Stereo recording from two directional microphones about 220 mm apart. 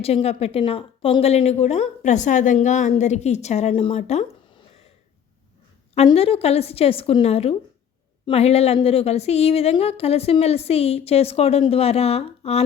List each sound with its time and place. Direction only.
0.0 s a woman's voice: 25° left (ahead or behind)
5.9 s a woman's voice: 30° left (ahead or behind)